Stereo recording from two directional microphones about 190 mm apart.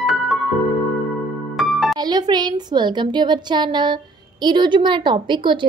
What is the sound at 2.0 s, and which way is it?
A woman's voice, 20° right (ahead or behind).